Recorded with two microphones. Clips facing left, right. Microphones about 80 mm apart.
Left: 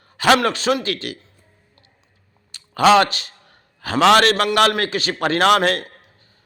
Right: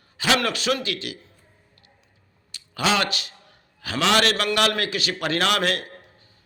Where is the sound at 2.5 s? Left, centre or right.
Left.